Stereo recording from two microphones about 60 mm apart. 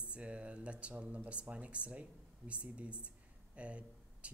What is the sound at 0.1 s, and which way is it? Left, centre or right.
Speech, right.